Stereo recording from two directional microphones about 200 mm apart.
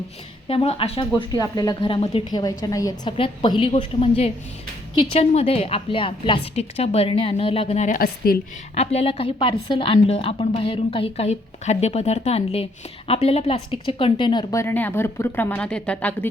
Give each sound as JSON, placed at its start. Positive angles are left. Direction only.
{"t": 0.4, "sound": "a woman's voice", "side_deg": 30}
{"t": 8.7, "sound": "a woman's voice", "side_deg": 30}